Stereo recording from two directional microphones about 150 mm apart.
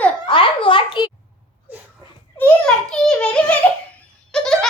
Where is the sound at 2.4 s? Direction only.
5° left (ahead or behind).